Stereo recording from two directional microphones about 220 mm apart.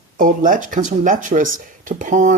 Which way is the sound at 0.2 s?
35° right (ahead or behind).